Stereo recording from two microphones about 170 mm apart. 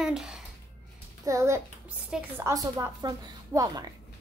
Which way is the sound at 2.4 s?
20° right (ahead or behind).